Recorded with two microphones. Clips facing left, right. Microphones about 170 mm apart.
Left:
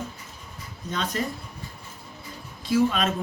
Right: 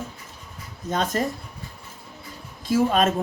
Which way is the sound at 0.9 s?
45° right (ahead or behind).